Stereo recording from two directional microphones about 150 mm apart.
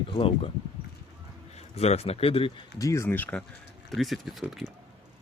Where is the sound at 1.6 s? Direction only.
45° left (ahead or behind).